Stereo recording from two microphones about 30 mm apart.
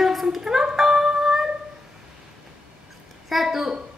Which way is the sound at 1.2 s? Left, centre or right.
Centre.